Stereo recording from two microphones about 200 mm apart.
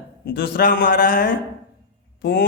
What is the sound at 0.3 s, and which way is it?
A man's voice, 45° left (ahead or behind).